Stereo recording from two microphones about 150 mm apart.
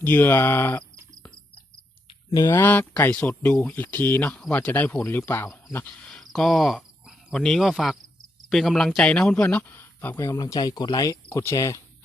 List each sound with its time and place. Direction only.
0.0 s speech: 10° left (ahead or behind)
2.0 s a sound: 25° left (ahead or behind)
2.5 s speech: 15° left (ahead or behind)
10.3 s speech: 25° left (ahead or behind)